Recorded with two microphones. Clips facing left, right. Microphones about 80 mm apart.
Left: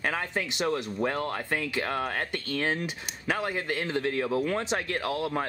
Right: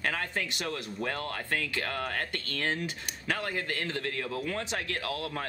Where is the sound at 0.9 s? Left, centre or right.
Left.